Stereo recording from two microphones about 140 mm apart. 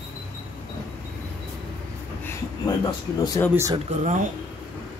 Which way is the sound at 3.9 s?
55° right (ahead or behind).